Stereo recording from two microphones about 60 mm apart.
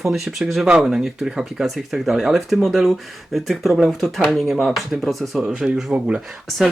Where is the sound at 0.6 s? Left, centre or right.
Centre.